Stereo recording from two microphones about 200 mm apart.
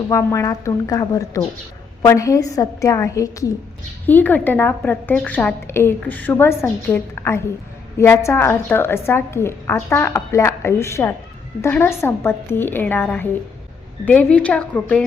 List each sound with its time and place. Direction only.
0.1 s a woman's voice: 15° left (ahead or behind)